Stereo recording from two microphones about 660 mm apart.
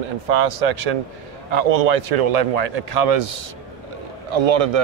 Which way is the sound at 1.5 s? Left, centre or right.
Right.